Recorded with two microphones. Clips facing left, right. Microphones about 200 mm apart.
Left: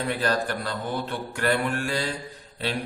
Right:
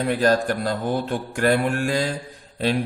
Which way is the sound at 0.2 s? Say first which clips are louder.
Right 6 dB; 45° right (ahead or behind).